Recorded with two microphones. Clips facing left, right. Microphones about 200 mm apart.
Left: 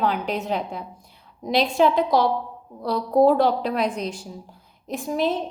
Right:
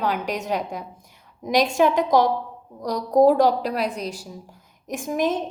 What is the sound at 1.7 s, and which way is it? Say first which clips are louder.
A woman's voice: even; 45° right (ahead or behind).